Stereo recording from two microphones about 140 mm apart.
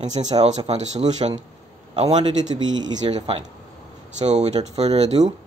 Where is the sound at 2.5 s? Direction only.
30° right (ahead or behind).